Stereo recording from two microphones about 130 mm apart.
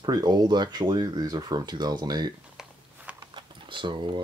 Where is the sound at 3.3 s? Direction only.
40° right (ahead or behind).